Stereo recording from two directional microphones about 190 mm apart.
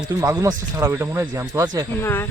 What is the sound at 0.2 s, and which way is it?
Speech, 15° right (ahead or behind).